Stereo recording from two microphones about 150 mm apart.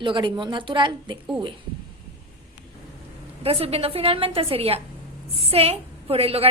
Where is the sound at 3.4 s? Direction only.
40° right (ahead or behind).